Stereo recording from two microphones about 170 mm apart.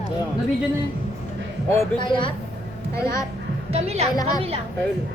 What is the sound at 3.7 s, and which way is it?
Speech, 40° right (ahead or behind).